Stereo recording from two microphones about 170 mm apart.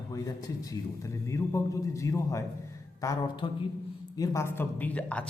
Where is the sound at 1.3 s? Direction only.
20° left (ahead or behind).